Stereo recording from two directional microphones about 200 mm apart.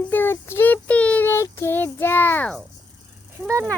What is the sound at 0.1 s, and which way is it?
Child singing, 10° left (ahead or behind).